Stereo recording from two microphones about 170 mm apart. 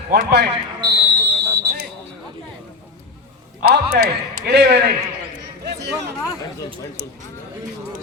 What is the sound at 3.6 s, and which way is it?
A man's voice, 65° right (ahead or behind).